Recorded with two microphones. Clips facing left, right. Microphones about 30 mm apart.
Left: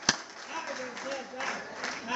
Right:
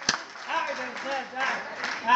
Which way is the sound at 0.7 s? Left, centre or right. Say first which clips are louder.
Right 5 dB; right.